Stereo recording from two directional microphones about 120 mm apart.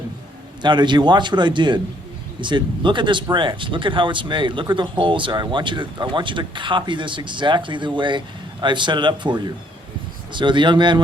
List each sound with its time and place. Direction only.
0.6 s speech: 40° right (ahead or behind)